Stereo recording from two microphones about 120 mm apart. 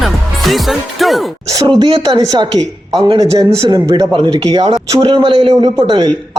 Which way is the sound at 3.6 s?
45° right (ahead or behind).